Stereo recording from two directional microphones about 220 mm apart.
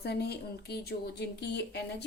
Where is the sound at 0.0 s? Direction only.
50° left (ahead or behind).